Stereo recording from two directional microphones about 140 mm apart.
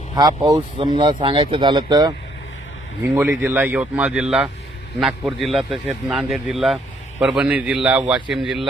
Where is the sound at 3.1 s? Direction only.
15° right (ahead or behind).